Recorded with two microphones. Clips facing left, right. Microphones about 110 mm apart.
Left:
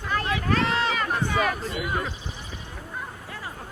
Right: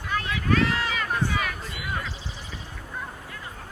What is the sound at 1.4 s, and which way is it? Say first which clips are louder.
Speech: left 6 dB; 40° left (ahead or behind).